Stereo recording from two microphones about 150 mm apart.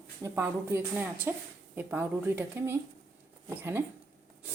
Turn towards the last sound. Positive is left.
turn(degrees=-15)  # may be behind; listen again after turning